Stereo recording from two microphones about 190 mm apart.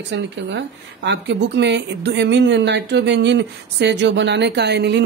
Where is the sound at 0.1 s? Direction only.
65° right (ahead or behind).